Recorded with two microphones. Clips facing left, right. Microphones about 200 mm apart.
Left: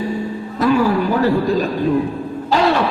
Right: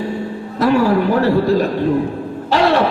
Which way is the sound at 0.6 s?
65° right (ahead or behind).